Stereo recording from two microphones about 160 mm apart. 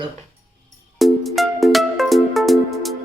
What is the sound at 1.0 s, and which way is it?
Music, centre (ahead or behind).